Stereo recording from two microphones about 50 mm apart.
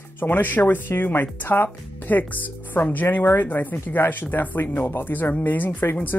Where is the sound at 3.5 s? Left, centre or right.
Left.